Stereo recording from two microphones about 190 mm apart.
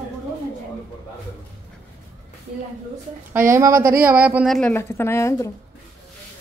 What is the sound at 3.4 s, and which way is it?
Speech, 15° right (ahead or behind).